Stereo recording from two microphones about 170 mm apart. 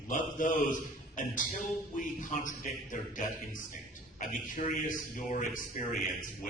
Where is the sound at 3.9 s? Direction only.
50° left (ahead or behind).